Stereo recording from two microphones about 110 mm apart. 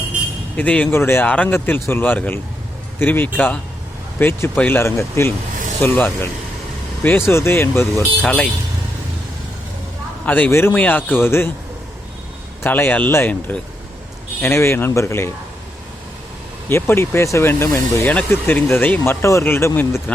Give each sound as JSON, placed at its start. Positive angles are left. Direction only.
{"t": 0.5, "sound": "speech", "side_deg": 15}
{"t": 8.2, "sound": "speech", "side_deg": 10}
{"t": 10.2, "sound": "speech", "side_deg": 15}
{"t": 12.6, "sound": "speech", "side_deg": 20}
{"t": 16.6, "sound": "speech", "side_deg": 20}